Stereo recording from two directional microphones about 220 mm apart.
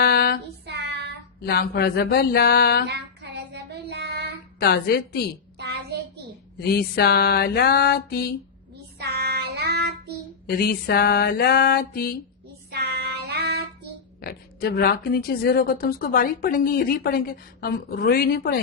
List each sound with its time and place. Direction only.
0.0 s child singing: 45° left (ahead or behind)
0.6 s child singing: 50° right (ahead or behind)
1.4 s speech: 45° left (ahead or behind)
2.8 s child singing: 50° right (ahead or behind)
4.6 s speech: 45° left (ahead or behind)
6.6 s speech: 45° left (ahead or behind)
9.0 s child singing: 50° right (ahead or behind)
10.4 s speech: 45° left (ahead or behind)
12.7 s child singing: 45° right (ahead or behind)
14.2 s speech: 45° left (ahead or behind)